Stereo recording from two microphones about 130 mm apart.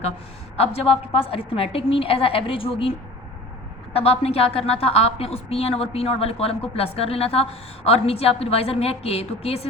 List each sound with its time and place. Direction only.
1.1 s a woman's voice: 45° left (ahead or behind)
3.9 s a woman's voice: 50° left (ahead or behind)